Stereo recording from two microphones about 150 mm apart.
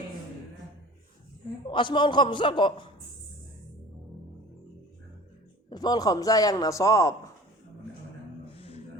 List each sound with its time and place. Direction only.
1.7 s a man's voice: 30° left (ahead or behind)
5.6 s a man's voice: 30° left (ahead or behind)
8.5 s a sound: 40° left (ahead or behind)